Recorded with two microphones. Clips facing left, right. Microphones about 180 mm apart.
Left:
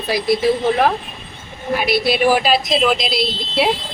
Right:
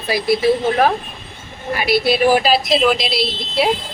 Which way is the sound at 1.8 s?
Centre (ahead or behind).